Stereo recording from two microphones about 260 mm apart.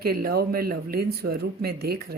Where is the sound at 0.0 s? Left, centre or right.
Right.